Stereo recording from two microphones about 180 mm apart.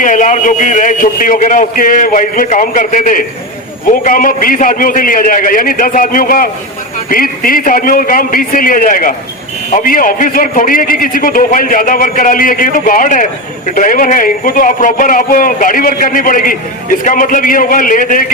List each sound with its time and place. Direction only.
0.0 s a man's voice: 45° left (ahead or behind)